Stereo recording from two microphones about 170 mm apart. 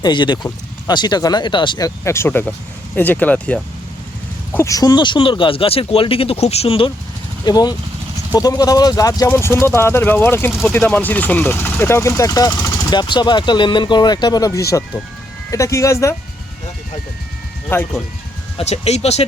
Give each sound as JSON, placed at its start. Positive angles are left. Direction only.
{"t": 0.0, "sound": "speech", "side_deg": 25}
{"t": 2.0, "sound": "speech", "side_deg": 15}
{"t": 7.4, "sound": "speech", "side_deg": 25}
{"t": 17.7, "sound": "speech", "side_deg": 15}
{"t": 18.5, "sound": "speech", "side_deg": 40}